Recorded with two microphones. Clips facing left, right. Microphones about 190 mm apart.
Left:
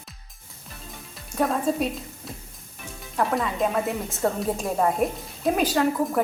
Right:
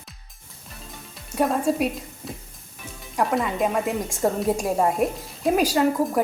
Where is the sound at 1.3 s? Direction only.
10° right (ahead or behind).